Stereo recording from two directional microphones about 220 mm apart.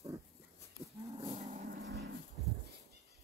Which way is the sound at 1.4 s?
35° right (ahead or behind).